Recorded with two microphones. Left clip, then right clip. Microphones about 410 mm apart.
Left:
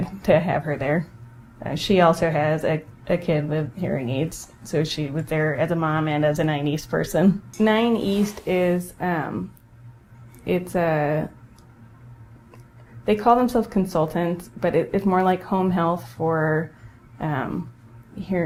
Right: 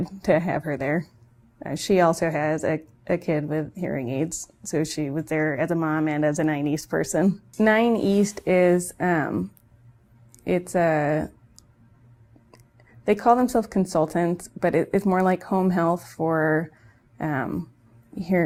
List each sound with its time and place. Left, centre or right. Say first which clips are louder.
0.2 s speech: left 3 dB; right
10.4 s speech: right 1 dB; right
13.1 s speech: left 1 dB; right